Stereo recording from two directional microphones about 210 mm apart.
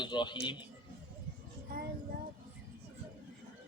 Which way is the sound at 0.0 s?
20° left (ahead or behind).